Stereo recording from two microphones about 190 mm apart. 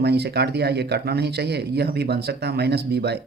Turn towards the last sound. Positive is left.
turn(degrees=-60)  # may be behind; listen again after turning